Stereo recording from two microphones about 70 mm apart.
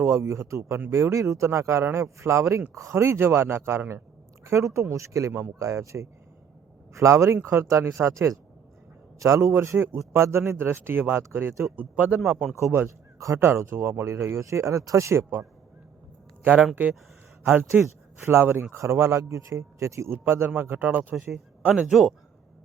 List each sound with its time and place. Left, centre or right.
0.0 s speech: right
11.8 s speech: right
12.5 s speech: right
13.4 s speech: right
16.4 s speech: right
17.4 s speech: right
21.8 s a man's voice: centre